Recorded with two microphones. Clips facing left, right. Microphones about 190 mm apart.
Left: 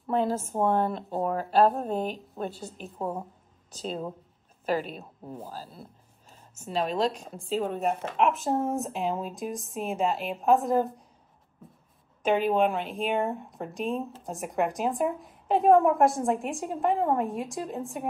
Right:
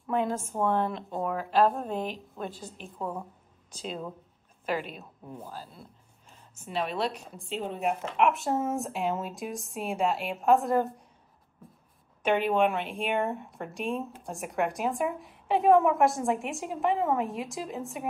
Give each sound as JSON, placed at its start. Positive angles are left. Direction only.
{"t": 0.0, "sound": "a woman's voice", "side_deg": 35}
{"t": 3.7, "sound": "a woman's voice", "side_deg": 40}
{"t": 5.8, "sound": "a sound", "side_deg": 40}
{"t": 6.7, "sound": "a woman's voice", "side_deg": 35}
{"t": 7.2, "sound": "speech", "side_deg": 0}
{"t": 12.4, "sound": "speech", "side_deg": 0}